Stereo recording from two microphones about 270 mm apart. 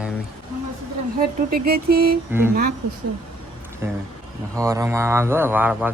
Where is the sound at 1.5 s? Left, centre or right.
Right.